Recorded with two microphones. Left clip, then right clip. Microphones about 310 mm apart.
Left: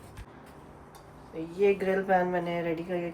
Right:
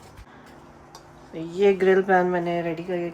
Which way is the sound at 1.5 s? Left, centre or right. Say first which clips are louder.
Right 7 dB; right.